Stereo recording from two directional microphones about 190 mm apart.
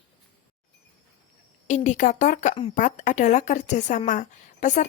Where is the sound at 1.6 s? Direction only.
40° left (ahead or behind).